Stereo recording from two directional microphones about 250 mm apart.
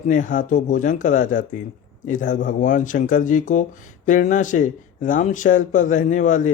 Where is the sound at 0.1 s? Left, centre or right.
Left.